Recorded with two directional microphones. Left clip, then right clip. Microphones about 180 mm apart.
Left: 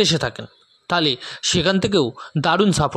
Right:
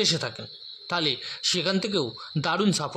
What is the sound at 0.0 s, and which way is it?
Speech, 45° left (ahead or behind).